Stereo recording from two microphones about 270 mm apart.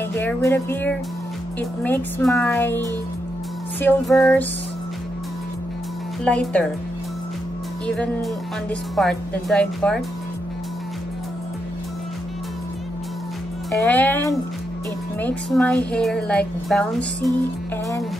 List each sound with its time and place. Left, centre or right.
0.1 s speech: centre
3.8 s speech: centre
6.2 s speech: centre
7.8 s speech: centre
13.7 s speech: centre